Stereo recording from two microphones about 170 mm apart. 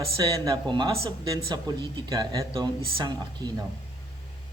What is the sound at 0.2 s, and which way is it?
A man's voice, 25° right (ahead or behind).